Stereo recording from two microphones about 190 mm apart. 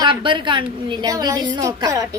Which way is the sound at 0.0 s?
25° right (ahead or behind).